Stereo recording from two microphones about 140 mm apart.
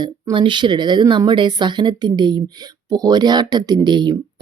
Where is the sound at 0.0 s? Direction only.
30° right (ahead or behind).